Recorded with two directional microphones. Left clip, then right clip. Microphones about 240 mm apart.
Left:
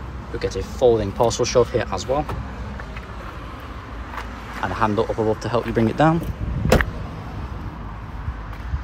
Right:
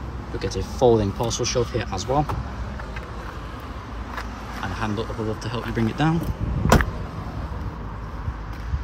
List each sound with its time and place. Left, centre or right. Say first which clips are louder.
0.4 s speech: left 2 dB; centre
4.6 s speech: left 8 dB; centre
6.6 s vehicle: left 1 dB; right